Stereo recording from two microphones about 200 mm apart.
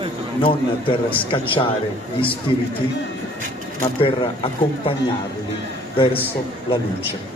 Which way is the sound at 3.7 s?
25° left (ahead or behind).